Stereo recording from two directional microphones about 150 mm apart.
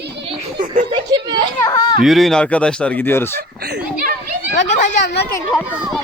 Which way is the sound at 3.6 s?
90° right.